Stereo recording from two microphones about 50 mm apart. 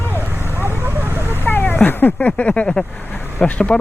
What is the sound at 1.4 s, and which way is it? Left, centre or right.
Dog, left.